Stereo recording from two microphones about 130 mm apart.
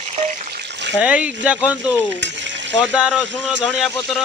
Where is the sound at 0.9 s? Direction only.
10° right (ahead or behind).